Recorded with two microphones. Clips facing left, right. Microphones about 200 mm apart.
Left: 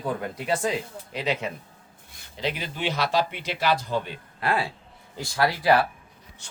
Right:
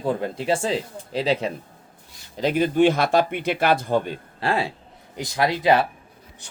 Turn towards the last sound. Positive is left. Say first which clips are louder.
# right 2 dB
turn(degrees=-20)  # may be behind; listen again after turning